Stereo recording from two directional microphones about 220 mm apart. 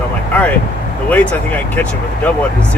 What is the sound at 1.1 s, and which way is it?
Speech, 5° left (ahead or behind).